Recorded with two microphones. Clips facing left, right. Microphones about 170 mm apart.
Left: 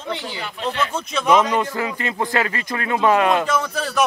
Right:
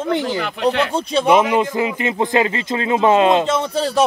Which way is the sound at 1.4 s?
15° right (ahead or behind).